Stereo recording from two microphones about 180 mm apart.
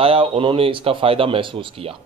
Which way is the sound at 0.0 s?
30° right (ahead or behind).